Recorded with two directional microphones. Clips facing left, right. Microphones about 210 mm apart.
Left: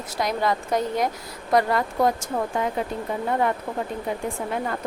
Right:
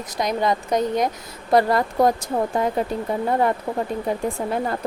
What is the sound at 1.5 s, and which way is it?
Speech, 35° right (ahead or behind).